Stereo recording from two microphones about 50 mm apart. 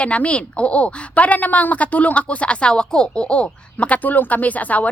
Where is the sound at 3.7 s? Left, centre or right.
Left.